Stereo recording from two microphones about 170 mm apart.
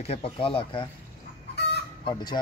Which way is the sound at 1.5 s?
85° left.